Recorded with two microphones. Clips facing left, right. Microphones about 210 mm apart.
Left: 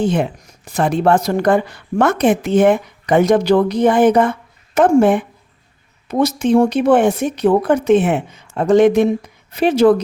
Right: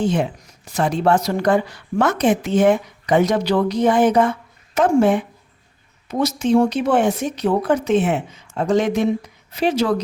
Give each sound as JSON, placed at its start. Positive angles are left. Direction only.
{"t": 0.0, "sound": "a woman's voice", "side_deg": 55}